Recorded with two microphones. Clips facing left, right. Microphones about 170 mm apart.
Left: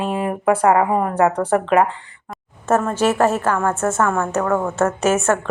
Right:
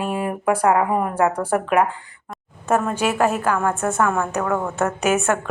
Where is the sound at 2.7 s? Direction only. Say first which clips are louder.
Left 3 dB; 10° right (ahead or behind).